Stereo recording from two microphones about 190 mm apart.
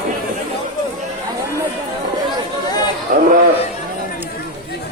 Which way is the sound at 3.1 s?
50° right (ahead or behind).